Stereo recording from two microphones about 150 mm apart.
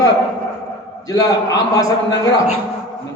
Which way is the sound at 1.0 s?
25° left (ahead or behind).